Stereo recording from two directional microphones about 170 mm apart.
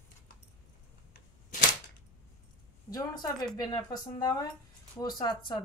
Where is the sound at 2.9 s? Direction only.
25° left (ahead or behind).